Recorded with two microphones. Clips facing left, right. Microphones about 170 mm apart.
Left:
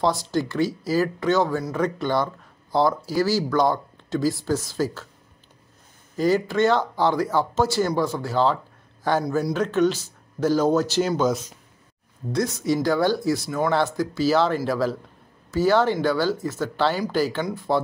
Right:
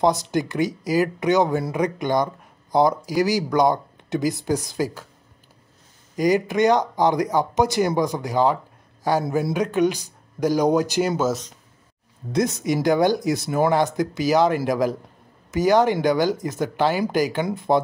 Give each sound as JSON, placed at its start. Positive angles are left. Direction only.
{"t": 0.0, "sound": "speech", "side_deg": -20}
{"t": 6.1, "sound": "speech", "side_deg": -15}
{"t": 12.3, "sound": "speech", "side_deg": -20}